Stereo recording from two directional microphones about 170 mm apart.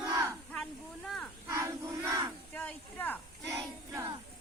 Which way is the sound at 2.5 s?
10° left (ahead or behind).